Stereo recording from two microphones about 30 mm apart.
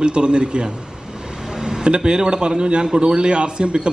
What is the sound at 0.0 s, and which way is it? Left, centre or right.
Speech, right.